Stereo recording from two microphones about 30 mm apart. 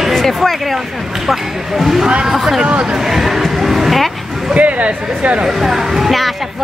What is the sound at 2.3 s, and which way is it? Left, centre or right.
Speech, centre.